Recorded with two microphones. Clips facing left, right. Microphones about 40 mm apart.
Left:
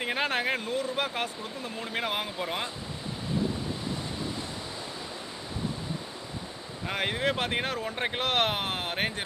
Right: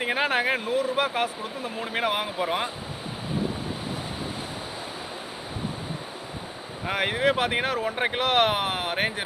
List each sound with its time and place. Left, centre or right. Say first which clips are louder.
0.0 s speech: right 4 dB; centre
6.8 s speech: right 5 dB; centre